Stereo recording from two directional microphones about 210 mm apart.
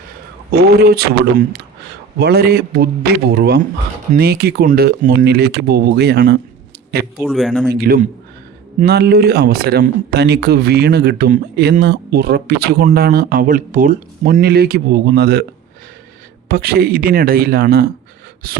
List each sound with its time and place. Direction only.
0.5 s speech: 50° right (ahead or behind)
2.1 s speech: 50° right (ahead or behind)
7.2 s speech: centre (ahead or behind)
7.7 s speech: 45° right (ahead or behind)
16.5 s speech: 45° right (ahead or behind)